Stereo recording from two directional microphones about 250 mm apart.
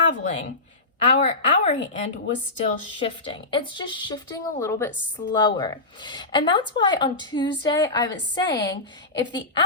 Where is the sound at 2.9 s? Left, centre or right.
Left.